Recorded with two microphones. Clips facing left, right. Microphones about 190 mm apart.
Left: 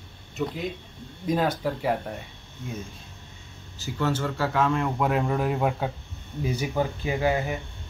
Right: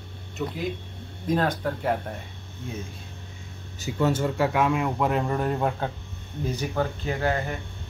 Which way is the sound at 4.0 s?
20° right (ahead or behind).